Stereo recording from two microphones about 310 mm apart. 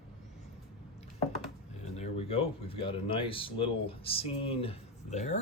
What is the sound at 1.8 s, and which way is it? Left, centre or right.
Speech, left.